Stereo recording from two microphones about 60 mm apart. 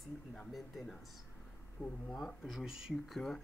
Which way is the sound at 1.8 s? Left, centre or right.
Left.